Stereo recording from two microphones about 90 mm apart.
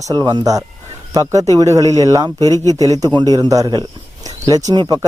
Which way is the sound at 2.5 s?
35° left (ahead or behind).